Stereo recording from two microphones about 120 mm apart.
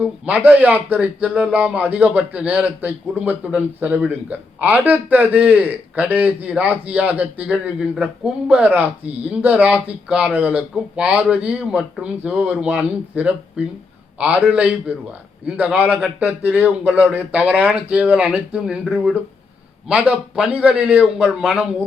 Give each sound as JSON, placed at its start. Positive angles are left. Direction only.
{"t": 0.0, "sound": "speech", "side_deg": -10}